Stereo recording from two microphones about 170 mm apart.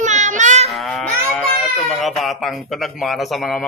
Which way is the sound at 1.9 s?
Centre (ahead or behind).